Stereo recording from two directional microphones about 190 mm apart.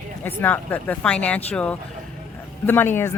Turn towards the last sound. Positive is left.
turn(degrees=10)  # may be behind; listen again after turning